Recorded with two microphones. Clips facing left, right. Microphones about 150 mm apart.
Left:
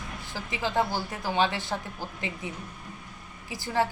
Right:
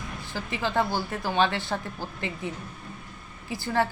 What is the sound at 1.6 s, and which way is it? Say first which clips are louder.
Speech: right 2 dB; 15° left (ahead or behind).